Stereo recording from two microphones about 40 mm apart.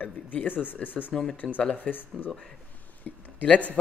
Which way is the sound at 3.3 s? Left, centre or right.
Left.